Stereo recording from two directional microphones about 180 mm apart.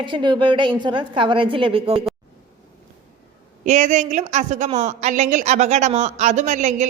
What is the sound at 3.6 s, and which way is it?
A woman's voice, 40° right (ahead or behind).